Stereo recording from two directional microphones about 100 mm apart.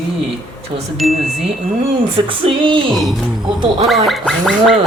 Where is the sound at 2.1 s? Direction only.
60° right (ahead or behind).